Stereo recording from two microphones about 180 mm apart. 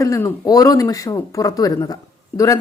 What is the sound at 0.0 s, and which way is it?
A woman's voice, 15° left (ahead or behind).